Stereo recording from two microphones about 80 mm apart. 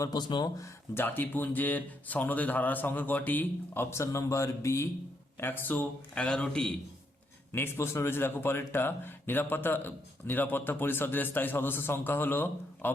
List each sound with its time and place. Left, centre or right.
0.0 s speech: left
0.9 s speech: left
3.8 s speech: left
5.4 s speech: left
6.1 s a man's voice: centre
7.5 s speech: left